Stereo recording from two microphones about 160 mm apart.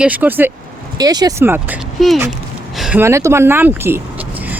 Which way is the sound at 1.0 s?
25° right (ahead or behind).